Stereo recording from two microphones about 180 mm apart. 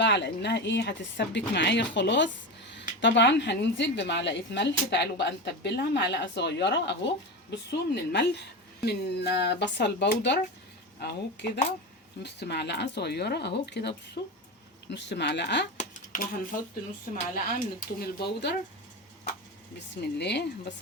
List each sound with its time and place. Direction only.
0.0 s speech: 75° left (ahead or behind)
14.8 s speech: 70° left (ahead or behind)
16.1 s speech: 50° left (ahead or behind)
17.3 s speech: 55° left (ahead or behind)
20.1 s speech: 70° left (ahead or behind)